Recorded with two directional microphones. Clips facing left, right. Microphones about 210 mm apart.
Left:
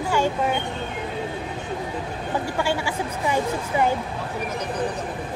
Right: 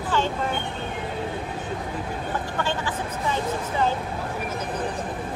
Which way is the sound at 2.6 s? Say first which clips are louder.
Left 3 dB; 10° left (ahead or behind).